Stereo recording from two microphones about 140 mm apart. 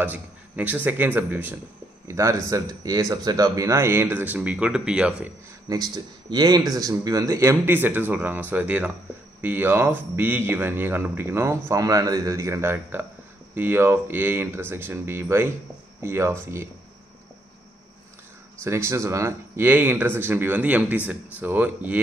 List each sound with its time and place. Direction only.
0.0 s speech: 10° right (ahead or behind)
5.7 s speech: 30° right (ahead or behind)
18.6 s speech: 20° right (ahead or behind)